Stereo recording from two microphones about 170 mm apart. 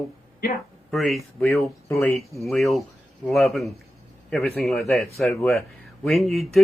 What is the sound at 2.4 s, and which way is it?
Speech, centre (ahead or behind).